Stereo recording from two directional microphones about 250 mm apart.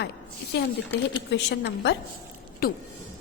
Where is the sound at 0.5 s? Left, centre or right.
Left.